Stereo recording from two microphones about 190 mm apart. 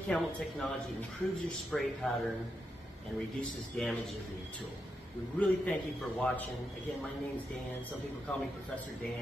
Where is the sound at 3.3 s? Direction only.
5° left (ahead or behind).